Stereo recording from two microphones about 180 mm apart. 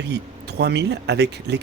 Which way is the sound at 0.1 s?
70° right (ahead or behind).